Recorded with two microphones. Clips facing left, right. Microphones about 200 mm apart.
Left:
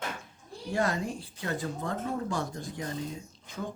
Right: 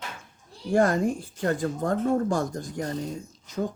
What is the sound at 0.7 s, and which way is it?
Speech, 50° right (ahead or behind).